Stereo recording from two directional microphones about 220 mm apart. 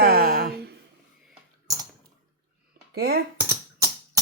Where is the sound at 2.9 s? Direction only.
45° right (ahead or behind).